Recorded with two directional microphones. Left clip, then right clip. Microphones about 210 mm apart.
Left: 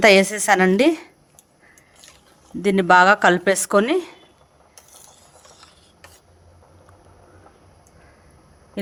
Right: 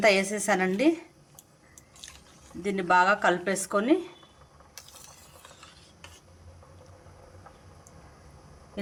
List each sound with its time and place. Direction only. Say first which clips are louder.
0.0 s a woman's voice: left 9 dB; 55° left (ahead or behind)
2.6 s a woman's voice: left 9 dB; 55° left (ahead or behind)